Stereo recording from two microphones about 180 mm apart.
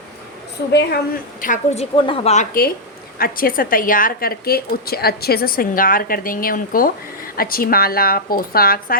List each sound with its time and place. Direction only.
0.7 s a woman's voice: 65° left (ahead or behind)